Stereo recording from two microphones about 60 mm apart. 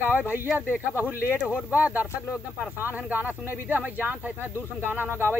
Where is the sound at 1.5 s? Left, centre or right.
Centre.